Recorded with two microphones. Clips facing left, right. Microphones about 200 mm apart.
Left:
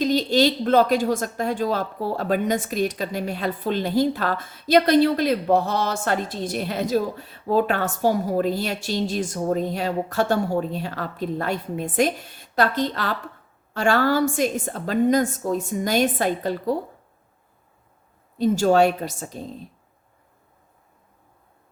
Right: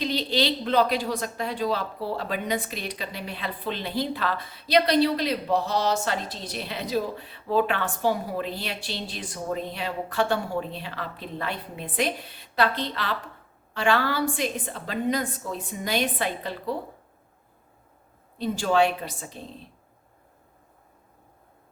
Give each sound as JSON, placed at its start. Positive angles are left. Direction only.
{"t": 0.0, "sound": "speech", "side_deg": 45}
{"t": 18.3, "sound": "speech", "side_deg": 45}